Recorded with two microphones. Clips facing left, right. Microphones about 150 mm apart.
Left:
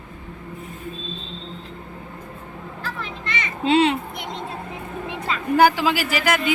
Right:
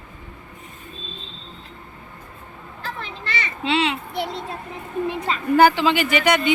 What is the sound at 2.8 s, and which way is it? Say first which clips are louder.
Children playing: right 1 dB; 35° right (ahead or behind).